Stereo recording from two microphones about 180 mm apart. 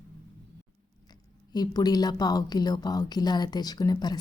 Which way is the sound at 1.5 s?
20° left (ahead or behind).